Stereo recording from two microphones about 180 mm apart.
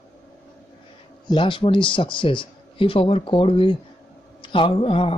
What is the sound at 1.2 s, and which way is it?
Speech, 25° left (ahead or behind).